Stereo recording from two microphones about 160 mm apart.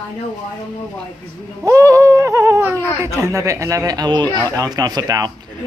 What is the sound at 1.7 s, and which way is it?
Speech, 20° right (ahead or behind).